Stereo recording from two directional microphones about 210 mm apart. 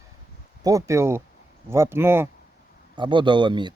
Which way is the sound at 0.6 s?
15° right (ahead or behind).